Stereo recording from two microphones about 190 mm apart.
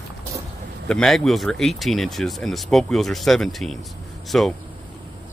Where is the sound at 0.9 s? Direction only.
Centre (ahead or behind).